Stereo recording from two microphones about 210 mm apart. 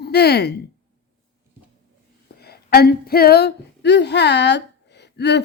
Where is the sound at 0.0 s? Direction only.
50° left (ahead or behind).